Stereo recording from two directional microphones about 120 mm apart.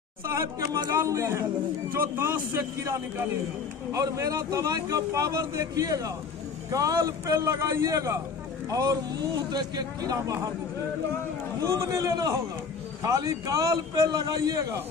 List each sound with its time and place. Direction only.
0.7 s a man's voice: 30° right (ahead or behind)
10.1 s a man's voice: 25° right (ahead or behind)
11.6 s a man's voice: 25° right (ahead or behind)